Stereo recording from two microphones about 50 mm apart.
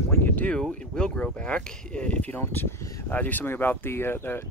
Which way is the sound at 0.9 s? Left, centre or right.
Centre.